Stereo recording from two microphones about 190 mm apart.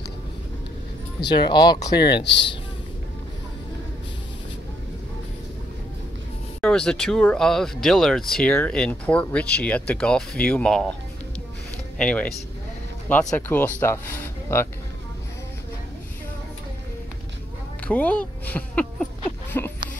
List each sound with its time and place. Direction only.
1.2 s speech: 25° left (ahead or behind)
2.1 s speech: 65° left (ahead or behind)
6.6 s speech: 5° left (ahead or behind)
12.0 s speech: 5° left (ahead or behind)
17.8 s speech: 5° left (ahead or behind)
19.6 s a sound: 10° left (ahead or behind)